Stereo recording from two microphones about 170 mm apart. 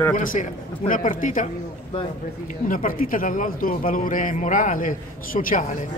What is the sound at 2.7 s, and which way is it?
Speech, 55° left (ahead or behind).